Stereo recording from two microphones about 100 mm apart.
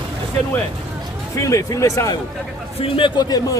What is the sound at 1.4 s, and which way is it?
Speech, 35° left (ahead or behind).